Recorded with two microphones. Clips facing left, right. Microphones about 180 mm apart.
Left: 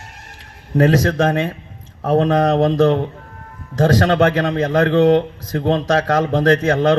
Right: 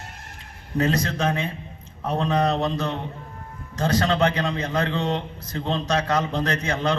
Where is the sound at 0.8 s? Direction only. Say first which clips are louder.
Left 8 dB; 90° left.